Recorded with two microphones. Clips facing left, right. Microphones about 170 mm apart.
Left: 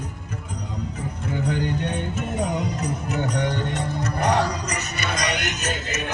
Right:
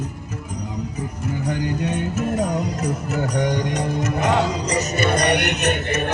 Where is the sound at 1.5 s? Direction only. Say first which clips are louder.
Right 2 dB; 5° right (ahead or behind).